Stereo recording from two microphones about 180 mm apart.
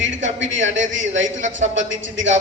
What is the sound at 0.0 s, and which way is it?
A man's voice, 90° right.